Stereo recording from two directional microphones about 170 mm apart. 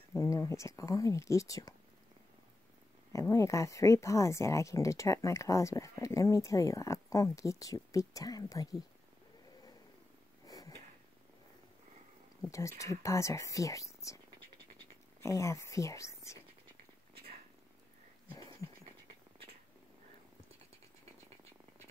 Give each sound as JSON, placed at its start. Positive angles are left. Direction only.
{"t": 0.1, "sound": "speech", "side_deg": 20}
{"t": 3.1, "sound": "speech", "side_deg": 20}
{"t": 10.4, "sound": "purr", "side_deg": 20}
{"t": 12.4, "sound": "speech", "side_deg": 20}
{"t": 15.2, "sound": "speech", "side_deg": 20}
{"t": 17.1, "sound": "cat", "side_deg": -65}